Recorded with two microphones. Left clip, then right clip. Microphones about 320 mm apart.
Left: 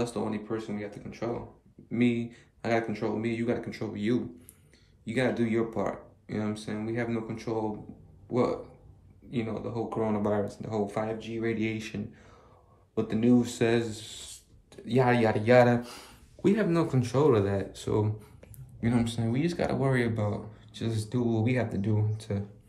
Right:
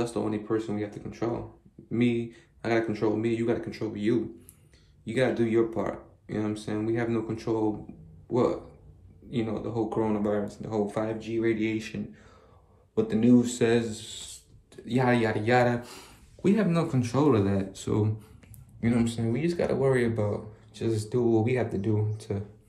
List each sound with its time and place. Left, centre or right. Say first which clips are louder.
0.0 s speech: right 2 dB; centre
1.9 s speech: right 1 dB; centre
12.9 s speech: right 3 dB; centre